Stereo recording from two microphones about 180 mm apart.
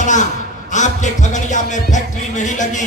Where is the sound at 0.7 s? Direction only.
40° left (ahead or behind).